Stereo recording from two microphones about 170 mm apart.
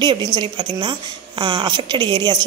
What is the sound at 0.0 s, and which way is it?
A woman's voice, 25° right (ahead or behind).